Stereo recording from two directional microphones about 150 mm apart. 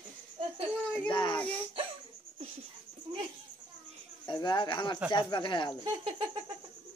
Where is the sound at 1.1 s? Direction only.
30° left (ahead or behind).